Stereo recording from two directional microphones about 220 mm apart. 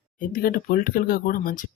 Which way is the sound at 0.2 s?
40° left (ahead or behind).